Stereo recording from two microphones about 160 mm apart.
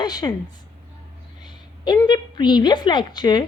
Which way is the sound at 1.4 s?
25° left (ahead or behind).